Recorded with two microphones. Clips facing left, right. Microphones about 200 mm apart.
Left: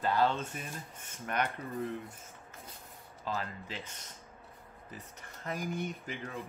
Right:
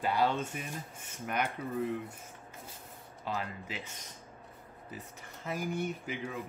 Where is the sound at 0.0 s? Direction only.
15° right (ahead or behind).